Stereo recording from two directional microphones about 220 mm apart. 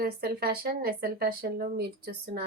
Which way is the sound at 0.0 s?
45° right (ahead or behind).